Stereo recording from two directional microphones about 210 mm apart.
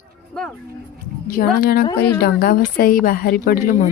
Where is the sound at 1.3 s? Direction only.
45° left (ahead or behind).